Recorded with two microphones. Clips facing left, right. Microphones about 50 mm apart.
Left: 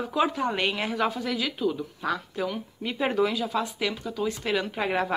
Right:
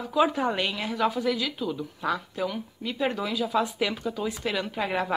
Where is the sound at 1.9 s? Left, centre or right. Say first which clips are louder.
Even; centre.